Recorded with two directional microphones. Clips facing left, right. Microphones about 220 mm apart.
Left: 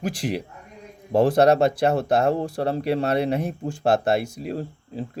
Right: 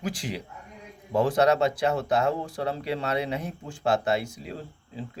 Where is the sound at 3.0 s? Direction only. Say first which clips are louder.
Left 6 dB; 55° left (ahead or behind).